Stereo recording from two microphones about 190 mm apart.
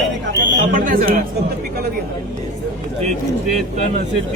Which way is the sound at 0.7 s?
45° right (ahead or behind).